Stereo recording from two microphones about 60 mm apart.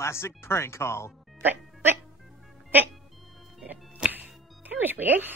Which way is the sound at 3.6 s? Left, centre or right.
Centre.